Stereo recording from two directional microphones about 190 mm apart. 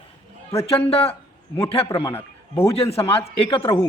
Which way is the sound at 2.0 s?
10° left (ahead or behind).